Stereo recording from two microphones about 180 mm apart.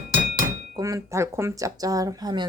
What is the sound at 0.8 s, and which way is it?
Speech, 20° right (ahead or behind).